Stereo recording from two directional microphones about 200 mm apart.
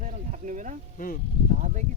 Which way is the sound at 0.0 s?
40° right (ahead or behind).